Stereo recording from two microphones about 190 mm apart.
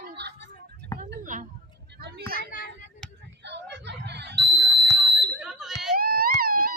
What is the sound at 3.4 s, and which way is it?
Smoke detector, 65° right (ahead or behind).